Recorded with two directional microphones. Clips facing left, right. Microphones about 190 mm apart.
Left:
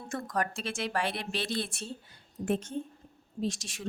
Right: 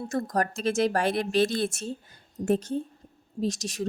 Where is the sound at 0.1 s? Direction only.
40° right (ahead or behind).